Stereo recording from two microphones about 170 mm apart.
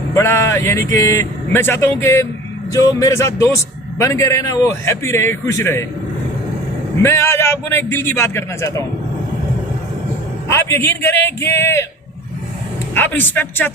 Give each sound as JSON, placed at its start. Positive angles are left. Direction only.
{"t": 0.1, "sound": "a man's voice", "side_deg": 15}
{"t": 7.0, "sound": "a man's voice", "side_deg": 15}
{"t": 10.5, "sound": "a man's voice", "side_deg": 15}
{"t": 12.9, "sound": "a man's voice", "side_deg": 10}